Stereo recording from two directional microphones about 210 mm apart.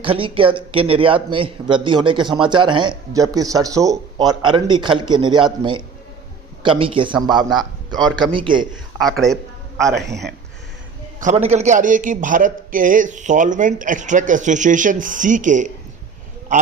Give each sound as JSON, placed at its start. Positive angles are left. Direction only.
{"t": 0.0, "sound": "speech", "side_deg": -25}
{"t": 9.0, "sound": "a man's voice", "side_deg": 0}
{"t": 11.4, "sound": "a man's voice", "side_deg": -35}